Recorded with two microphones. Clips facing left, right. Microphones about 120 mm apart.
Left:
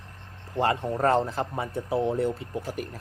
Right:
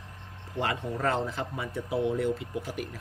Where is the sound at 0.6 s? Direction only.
40° left (ahead or behind).